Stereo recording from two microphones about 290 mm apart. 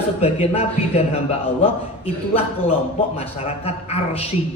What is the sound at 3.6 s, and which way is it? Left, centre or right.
Speech, left.